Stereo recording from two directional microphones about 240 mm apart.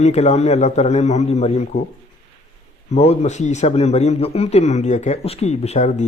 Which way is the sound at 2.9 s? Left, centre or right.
Left.